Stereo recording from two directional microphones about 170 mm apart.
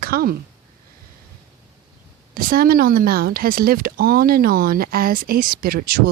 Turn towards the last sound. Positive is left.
turn(degrees=-65)  # may be behind; listen again after turning